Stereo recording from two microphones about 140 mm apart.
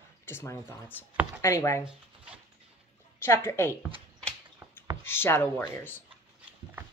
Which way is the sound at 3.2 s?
20° left (ahead or behind).